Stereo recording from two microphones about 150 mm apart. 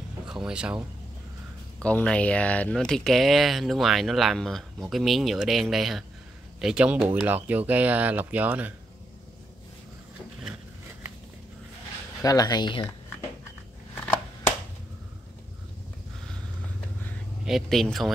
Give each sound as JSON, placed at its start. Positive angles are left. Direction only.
{"t": 0.3, "sound": "speech", "side_deg": -5}
{"t": 1.8, "sound": "speech", "side_deg": 5}
{"t": 7.0, "sound": "speech", "side_deg": -35}
{"t": 7.2, "sound": "speech", "side_deg": -10}
{"t": 12.2, "sound": "speech", "side_deg": 25}
{"t": 17.5, "sound": "speech", "side_deg": 0}